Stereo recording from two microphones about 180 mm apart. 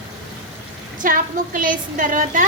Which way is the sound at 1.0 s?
50° right (ahead or behind).